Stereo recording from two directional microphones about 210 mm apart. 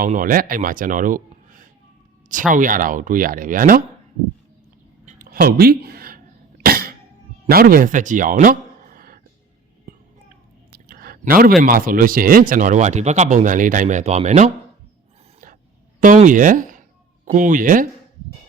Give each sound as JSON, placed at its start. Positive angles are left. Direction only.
{"t": 0.0, "sound": "a man's voice", "side_deg": -40}
{"t": 5.0, "sound": "cough", "side_deg": -40}
{"t": 7.5, "sound": "speech", "side_deg": -45}
{"t": 9.9, "sound": "a sound", "side_deg": -40}
{"t": 11.6, "sound": "speech", "side_deg": -40}
{"t": 16.0, "sound": "speech", "side_deg": -35}